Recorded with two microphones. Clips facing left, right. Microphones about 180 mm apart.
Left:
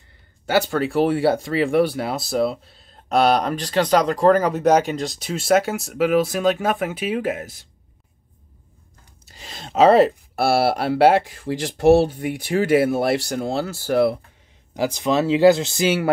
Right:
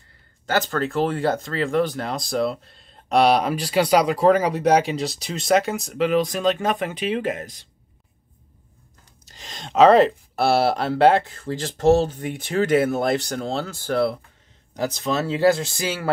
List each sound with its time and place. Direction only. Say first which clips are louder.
0.5 s speech: left 3 dB; 10° left (ahead or behind)
9.2 s speech: even; 5° left (ahead or behind)